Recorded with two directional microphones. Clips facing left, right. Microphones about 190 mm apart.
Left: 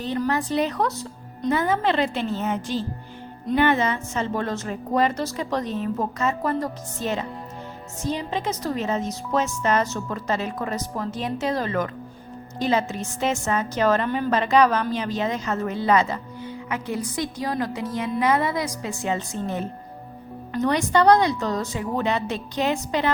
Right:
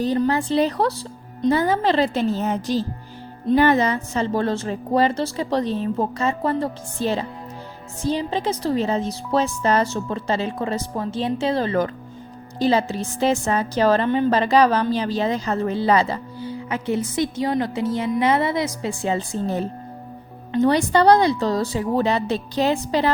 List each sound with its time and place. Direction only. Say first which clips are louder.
0.2 s a woman's voice: even; 30° right (ahead or behind)